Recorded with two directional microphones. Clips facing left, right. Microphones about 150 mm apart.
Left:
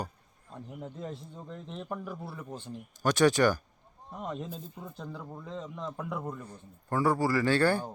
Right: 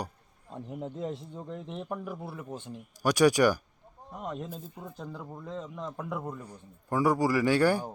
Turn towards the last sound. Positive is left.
turn(degrees=-10)  # may be behind; listen again after turning